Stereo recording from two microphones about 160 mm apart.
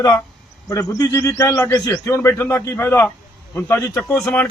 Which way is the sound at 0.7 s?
20° left (ahead or behind).